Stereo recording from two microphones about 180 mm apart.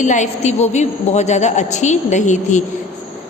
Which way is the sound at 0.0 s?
40° left (ahead or behind).